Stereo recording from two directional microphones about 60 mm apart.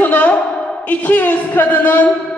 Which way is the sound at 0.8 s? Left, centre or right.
Left.